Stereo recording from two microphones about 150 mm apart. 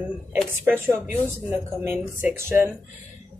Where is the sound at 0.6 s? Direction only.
15° right (ahead or behind).